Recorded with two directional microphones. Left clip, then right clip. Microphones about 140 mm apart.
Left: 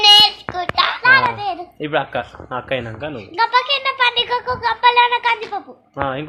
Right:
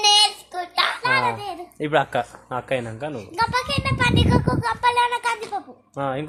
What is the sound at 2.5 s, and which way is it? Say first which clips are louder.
A woman's voice: left 2 dB; 25° right (ahead or behind).